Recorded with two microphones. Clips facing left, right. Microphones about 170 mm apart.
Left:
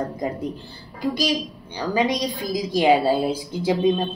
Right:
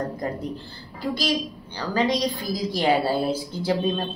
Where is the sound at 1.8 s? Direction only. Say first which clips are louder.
Left 1 dB; 15° left (ahead or behind).